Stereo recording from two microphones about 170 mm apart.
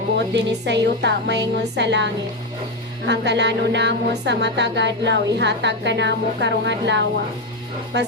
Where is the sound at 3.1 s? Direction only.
90° right.